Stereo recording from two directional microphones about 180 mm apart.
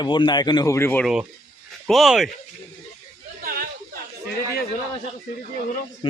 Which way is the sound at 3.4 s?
55° right (ahead or behind).